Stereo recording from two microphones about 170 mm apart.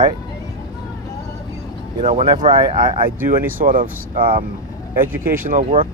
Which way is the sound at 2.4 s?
30° right (ahead or behind).